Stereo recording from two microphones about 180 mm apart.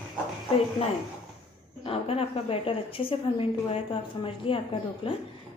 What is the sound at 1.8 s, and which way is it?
A woman's voice, 30° left (ahead or behind).